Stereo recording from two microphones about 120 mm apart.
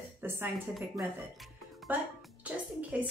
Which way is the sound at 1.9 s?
15° right (ahead or behind).